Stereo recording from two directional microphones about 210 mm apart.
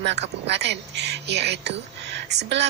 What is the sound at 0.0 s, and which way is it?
A woman's voice, 55° right (ahead or behind).